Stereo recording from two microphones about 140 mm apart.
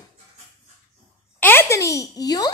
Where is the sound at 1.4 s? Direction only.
15° left (ahead or behind).